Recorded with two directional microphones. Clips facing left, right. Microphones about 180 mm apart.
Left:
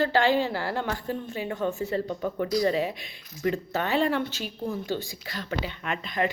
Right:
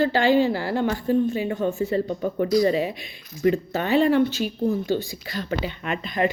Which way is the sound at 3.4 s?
15° right (ahead or behind).